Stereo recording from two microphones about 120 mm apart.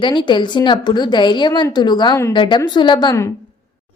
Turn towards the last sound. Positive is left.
turn(degrees=40)  # may be behind; listen again after turning